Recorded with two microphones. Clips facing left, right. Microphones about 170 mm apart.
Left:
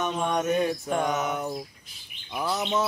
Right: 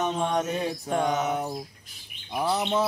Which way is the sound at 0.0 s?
30° right (ahead or behind).